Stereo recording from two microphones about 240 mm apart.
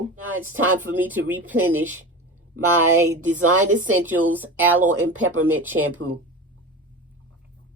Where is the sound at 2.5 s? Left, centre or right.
Right.